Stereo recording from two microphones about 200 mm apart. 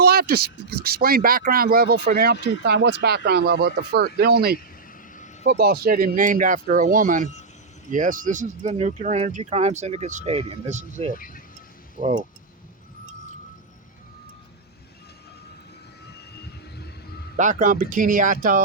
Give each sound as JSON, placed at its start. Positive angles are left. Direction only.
{"t": 0.0, "sound": "speech", "side_deg": -50}
{"t": 16.4, "sound": "a sound", "side_deg": 55}
{"t": 17.3, "sound": "speech", "side_deg": -40}